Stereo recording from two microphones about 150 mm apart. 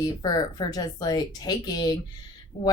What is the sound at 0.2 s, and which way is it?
Speech, 25° left (ahead or behind).